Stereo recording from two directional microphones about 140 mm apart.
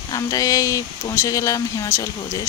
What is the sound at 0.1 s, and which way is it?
Speech, 25° left (ahead or behind).